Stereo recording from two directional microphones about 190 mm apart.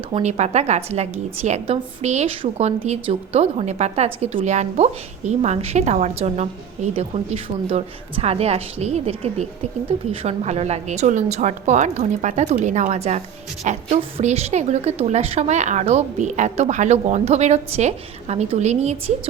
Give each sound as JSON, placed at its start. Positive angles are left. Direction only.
{"t": 0.1, "sound": "a woman's voice", "side_deg": -35}